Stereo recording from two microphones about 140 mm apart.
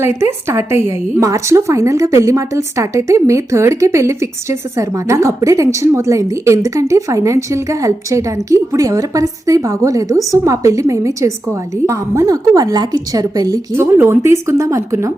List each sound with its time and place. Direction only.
0.0 s a woman's voice: 15° right (ahead or behind)